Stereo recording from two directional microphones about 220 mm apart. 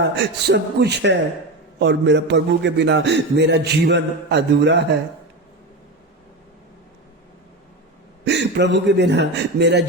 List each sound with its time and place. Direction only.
0.0 s a man's voice: 50° right (ahead or behind)
8.2 s a man's voice: 50° right (ahead or behind)